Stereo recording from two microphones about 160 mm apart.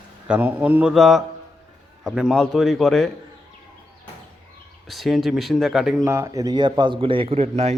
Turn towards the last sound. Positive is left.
turn(degrees=-40)  # may be behind; listen again after turning